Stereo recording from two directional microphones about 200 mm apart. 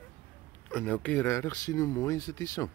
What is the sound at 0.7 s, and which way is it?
Speech, 5° left (ahead or behind).